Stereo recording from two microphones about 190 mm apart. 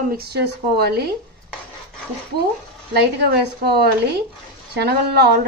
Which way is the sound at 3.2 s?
60° right (ahead or behind).